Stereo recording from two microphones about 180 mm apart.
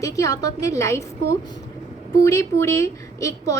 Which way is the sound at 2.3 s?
15° left (ahead or behind).